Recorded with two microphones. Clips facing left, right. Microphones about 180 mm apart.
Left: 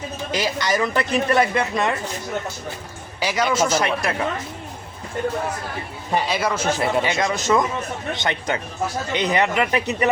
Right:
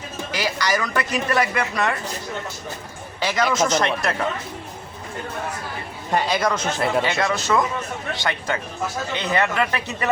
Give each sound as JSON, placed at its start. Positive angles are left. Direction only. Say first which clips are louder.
{"t": 0.3, "sound": "speech", "louder": "left 1 dB", "side_deg": 20}
{"t": 3.2, "sound": "speech", "louder": "even", "side_deg": 10}
{"t": 6.1, "sound": "speech", "louder": "right 1 dB", "side_deg": 5}